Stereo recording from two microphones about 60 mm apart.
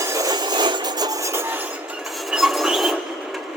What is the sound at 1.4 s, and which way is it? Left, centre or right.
Chink, right.